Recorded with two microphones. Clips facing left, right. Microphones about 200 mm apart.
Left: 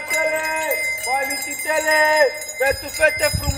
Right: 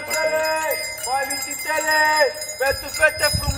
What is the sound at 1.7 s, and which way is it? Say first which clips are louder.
Jingle bell: left 5 dB; 30° left (ahead or behind).